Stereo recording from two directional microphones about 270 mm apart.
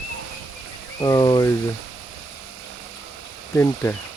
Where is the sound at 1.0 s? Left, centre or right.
Centre.